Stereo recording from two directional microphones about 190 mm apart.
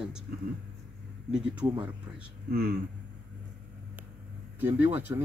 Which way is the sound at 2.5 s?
55° right (ahead or behind).